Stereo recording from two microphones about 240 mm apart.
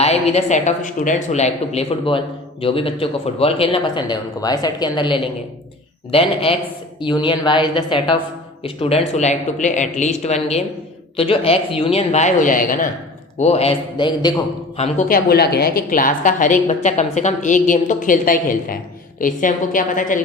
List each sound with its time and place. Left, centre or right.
0.0 s speech: left
14.8 s a woman's voice: left